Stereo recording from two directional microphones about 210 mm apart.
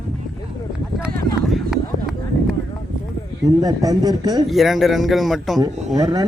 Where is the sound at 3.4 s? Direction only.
15° right (ahead or behind).